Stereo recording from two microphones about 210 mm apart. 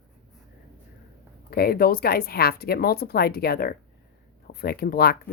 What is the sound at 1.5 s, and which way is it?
Speech, 45° left (ahead or behind).